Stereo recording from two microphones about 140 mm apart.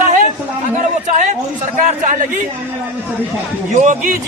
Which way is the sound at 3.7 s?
60° right (ahead or behind).